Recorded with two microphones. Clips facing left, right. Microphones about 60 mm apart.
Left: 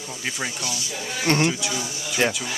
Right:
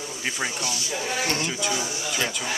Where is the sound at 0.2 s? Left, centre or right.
Centre.